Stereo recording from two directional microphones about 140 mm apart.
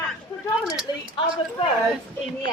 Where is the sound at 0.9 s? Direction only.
30° left (ahead or behind).